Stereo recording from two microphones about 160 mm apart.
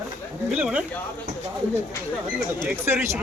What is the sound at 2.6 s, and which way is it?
Speech, 15° right (ahead or behind).